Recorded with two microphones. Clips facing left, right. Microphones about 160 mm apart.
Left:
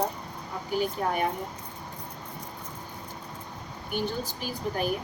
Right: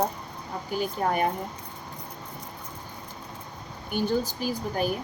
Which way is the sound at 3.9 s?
40° right (ahead or behind).